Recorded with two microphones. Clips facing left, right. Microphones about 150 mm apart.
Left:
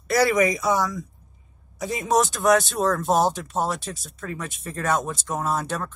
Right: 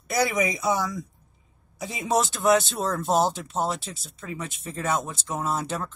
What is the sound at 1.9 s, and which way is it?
Speech, 50° left (ahead or behind).